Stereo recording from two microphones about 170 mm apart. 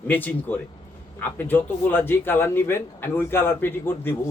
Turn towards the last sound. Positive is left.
turn(degrees=15)  # may be behind; listen again after turning